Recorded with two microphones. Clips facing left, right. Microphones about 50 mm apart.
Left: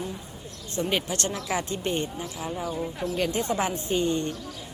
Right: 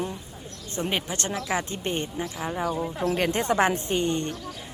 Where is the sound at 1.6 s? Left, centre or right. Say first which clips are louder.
Left 1 dB; right.